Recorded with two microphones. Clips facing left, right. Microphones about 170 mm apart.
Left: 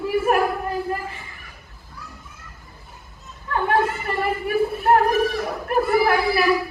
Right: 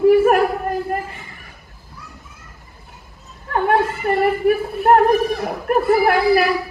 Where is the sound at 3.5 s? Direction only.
50° right (ahead or behind).